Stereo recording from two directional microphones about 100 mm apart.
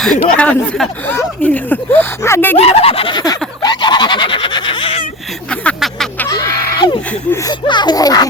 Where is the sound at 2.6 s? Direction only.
90° left; by 3.2 s 70° left (ahead or behind).